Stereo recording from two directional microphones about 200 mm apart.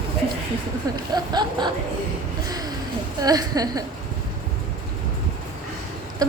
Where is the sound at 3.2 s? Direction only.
20° right (ahead or behind).